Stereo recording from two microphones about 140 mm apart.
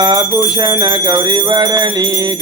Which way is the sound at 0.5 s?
35° right (ahead or behind).